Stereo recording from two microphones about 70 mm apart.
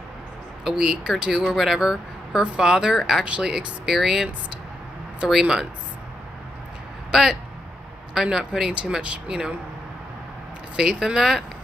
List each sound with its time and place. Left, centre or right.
0.7 s speech: centre
5.3 s speech: centre
7.1 s speech: centre
10.8 s speech: centre